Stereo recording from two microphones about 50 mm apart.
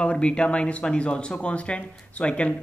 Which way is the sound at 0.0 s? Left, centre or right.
Centre.